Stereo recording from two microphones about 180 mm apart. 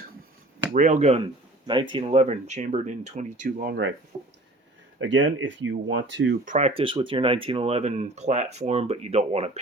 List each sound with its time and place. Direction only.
0.7 s speech: 45° right (ahead or behind)
4.1 s speech: 10° right (ahead or behind)
4.9 s speech: 90° right
6.4 s speech: 40° right (ahead or behind)